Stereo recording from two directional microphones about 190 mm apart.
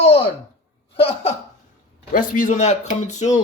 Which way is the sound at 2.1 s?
45° left (ahead or behind).